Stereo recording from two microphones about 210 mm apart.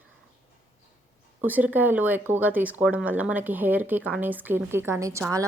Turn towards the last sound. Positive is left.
turn(degrees=-15)  # may be behind; listen again after turning